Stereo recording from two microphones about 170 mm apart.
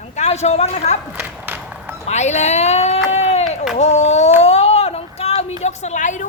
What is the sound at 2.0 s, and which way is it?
Speech, 40° left (ahead or behind).